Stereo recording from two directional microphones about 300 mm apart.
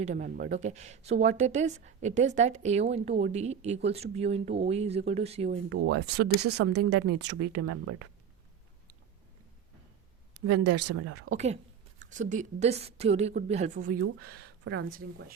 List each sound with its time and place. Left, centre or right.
0.0 s a woman's voice: right
5.6 s speech: right
10.4 s speech: right
11.3 s a woman's voice: right
14.2 s speech: right